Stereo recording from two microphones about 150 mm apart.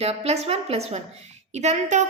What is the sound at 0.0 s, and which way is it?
A woman's voice, 45° right (ahead or behind).